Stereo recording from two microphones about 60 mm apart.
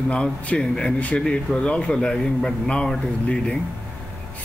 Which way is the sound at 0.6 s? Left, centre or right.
Centre.